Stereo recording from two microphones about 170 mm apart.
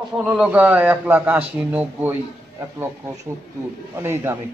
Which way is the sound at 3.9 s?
15° right (ahead or behind).